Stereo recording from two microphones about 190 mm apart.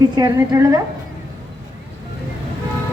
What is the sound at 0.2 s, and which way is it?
Speech, 15° right (ahead or behind).